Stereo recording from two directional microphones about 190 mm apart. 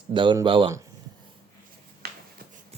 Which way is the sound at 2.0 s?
55° right (ahead or behind).